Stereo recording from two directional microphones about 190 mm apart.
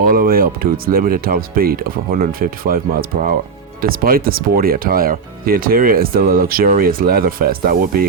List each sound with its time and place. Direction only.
0.0 s speech: 50° right (ahead or behind)